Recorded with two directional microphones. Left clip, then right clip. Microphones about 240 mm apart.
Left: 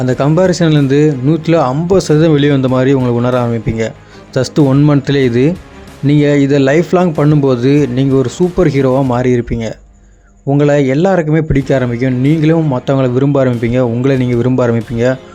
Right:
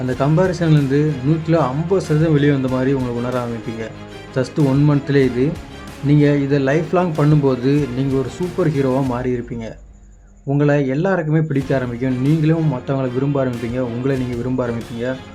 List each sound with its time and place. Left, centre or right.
0.0 s speech: left